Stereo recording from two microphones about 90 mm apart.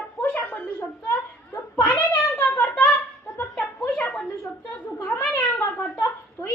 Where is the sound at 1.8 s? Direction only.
30° left (ahead or behind).